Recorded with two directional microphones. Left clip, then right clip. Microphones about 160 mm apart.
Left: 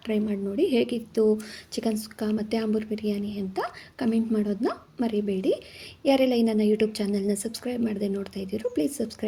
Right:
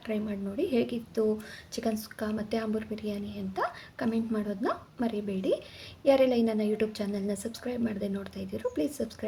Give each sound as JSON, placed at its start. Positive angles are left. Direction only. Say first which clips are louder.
{"t": 0.1, "sound": "a woman's voice", "louder": "left 6 dB", "side_deg": 35}